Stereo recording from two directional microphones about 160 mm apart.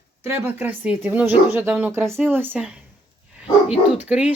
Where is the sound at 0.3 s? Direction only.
10° right (ahead or behind).